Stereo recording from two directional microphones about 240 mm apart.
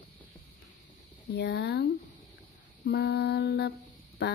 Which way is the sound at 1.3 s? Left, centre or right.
Left.